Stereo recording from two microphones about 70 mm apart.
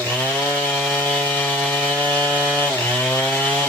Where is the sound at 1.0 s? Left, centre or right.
Centre.